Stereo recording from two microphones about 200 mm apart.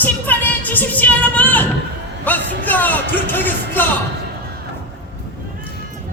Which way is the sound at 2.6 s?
10° left (ahead or behind).